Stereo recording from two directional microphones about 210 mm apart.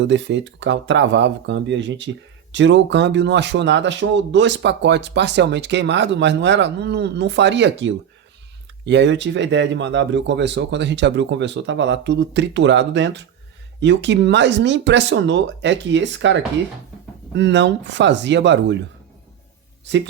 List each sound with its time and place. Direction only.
0.0 s speech: 60° right (ahead or behind)